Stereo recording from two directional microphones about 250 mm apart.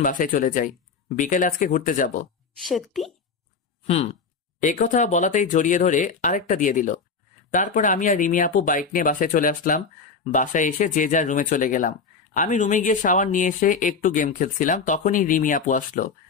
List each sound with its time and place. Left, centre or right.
0.0 s speech: left
2.6 s a woman's voice: centre
3.8 s speech: left